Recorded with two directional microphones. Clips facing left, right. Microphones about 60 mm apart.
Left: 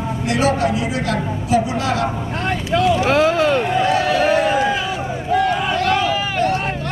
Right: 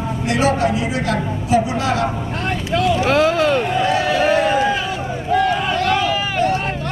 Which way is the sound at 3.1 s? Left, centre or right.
Centre.